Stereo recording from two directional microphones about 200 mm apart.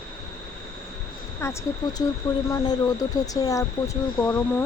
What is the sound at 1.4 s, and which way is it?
Speech, 15° left (ahead or behind).